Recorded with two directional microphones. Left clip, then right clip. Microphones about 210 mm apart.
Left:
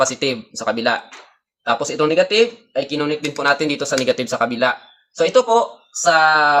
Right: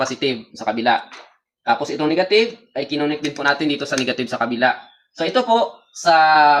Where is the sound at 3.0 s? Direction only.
20° left (ahead or behind).